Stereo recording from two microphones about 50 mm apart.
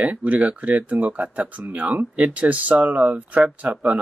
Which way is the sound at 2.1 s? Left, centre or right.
Right.